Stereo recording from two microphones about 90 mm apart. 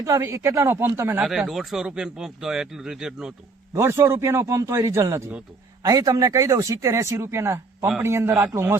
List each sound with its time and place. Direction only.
0.0 s speech: 35° right (ahead or behind)
1.2 s speech: 5° right (ahead or behind)
3.8 s speech: 35° right (ahead or behind)
5.8 s a man's voice: 45° right (ahead or behind); by 8.7 s 25° right (ahead or behind)